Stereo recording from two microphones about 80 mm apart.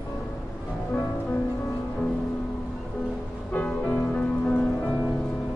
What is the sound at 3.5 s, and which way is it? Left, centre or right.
Music, centre.